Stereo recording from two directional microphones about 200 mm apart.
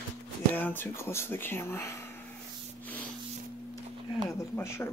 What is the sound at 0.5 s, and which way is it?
Speech, 10° left (ahead or behind).